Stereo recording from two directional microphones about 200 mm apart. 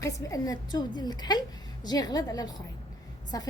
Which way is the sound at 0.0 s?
15° left (ahead or behind).